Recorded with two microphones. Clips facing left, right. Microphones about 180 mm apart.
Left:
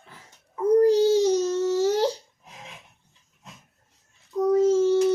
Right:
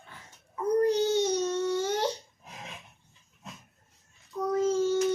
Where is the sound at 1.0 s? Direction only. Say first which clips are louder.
Left 6 dB; 35° left (ahead or behind).